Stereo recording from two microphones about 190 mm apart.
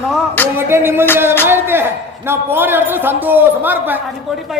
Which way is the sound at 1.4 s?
10° right (ahead or behind).